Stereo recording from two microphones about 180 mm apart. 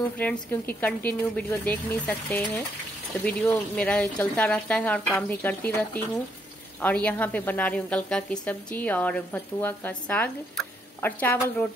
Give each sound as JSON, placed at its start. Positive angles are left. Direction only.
{"t": 0.2, "sound": "a woman's voice", "side_deg": 10}